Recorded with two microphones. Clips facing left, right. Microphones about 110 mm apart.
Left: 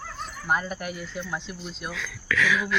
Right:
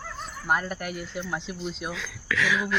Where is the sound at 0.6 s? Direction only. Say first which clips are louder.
Even; 5° left (ahead or behind).